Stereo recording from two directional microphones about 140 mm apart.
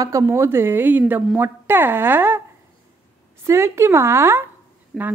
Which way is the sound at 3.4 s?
20° right (ahead or behind).